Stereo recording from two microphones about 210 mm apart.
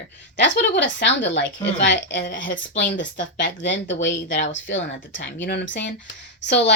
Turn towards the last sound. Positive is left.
turn(degrees=55)  # may be behind; listen again after turning